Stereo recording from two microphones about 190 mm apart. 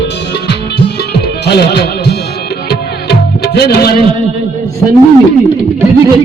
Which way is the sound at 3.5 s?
55° left (ahead or behind).